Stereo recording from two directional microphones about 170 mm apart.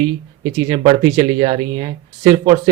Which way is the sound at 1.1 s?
35° right (ahead or behind).